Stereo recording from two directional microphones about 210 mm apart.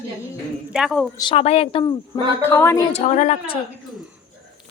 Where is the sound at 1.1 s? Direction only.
25° left (ahead or behind).